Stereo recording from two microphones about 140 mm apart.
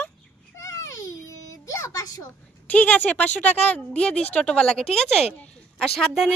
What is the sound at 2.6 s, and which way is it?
A woman's voice, 10° left (ahead or behind).